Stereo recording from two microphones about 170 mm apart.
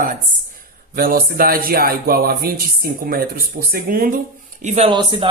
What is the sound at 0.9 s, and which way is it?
Speech, 60° right (ahead or behind).